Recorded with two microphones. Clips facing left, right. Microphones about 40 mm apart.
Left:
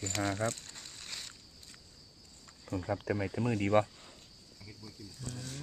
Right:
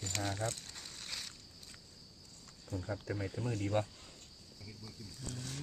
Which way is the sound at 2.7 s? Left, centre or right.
Left.